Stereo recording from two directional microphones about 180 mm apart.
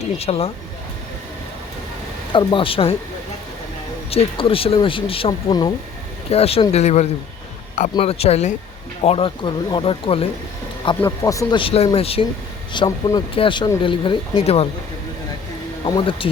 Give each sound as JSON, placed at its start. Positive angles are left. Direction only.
{"t": 0.2, "sound": "speech", "side_deg": 35}
{"t": 2.3, "sound": "speech", "side_deg": 30}
{"t": 4.1, "sound": "speech", "side_deg": 30}
{"t": 11.0, "sound": "speech", "side_deg": 20}
{"t": 11.6, "sound": "speech", "side_deg": 35}
{"t": 15.9, "sound": "speech", "side_deg": 25}